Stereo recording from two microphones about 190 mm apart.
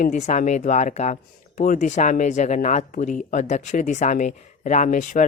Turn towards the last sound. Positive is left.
turn(degrees=40)  # may be behind; listen again after turning